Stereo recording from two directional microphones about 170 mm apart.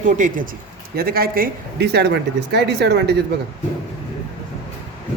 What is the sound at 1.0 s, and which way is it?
Speech, 65° right (ahead or behind).